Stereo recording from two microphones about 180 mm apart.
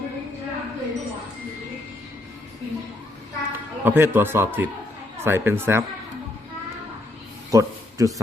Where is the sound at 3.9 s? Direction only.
10° right (ahead or behind).